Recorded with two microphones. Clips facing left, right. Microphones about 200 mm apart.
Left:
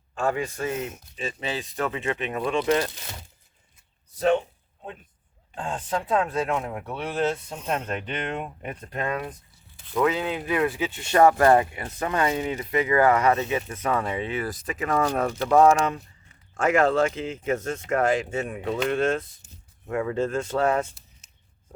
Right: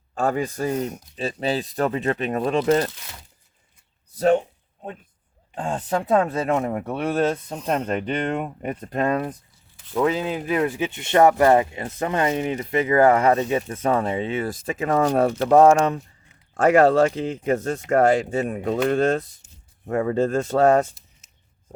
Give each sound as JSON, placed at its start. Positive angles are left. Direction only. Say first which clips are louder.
{"t": 0.1, "sound": "speech", "louder": "right 3 dB", "side_deg": -40}
{"t": 4.2, "sound": "speech", "louder": "right 3 dB", "side_deg": -40}
{"t": 6.1, "sound": "speech", "louder": "right 4 dB", "side_deg": -45}
{"t": 7.4, "sound": "speech", "louder": "right 5 dB", "side_deg": -35}